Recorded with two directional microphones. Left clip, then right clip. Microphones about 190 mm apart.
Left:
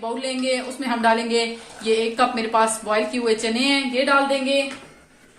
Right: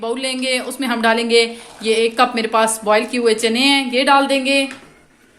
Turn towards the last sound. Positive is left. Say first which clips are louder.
# right 5 dB
turn(degrees=-50)  # may be behind; listen again after turning